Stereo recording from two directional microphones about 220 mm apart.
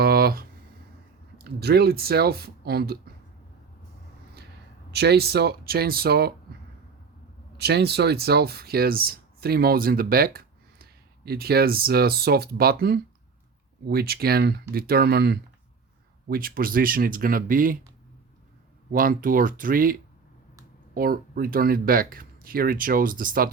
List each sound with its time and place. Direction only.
0.0 s a sound: 45° right (ahead or behind)
1.5 s speech: 45° right (ahead or behind)
4.9 s speech: 45° right (ahead or behind)
7.6 s speech: 50° right (ahead or behind)
18.9 s speech: 40° right (ahead or behind)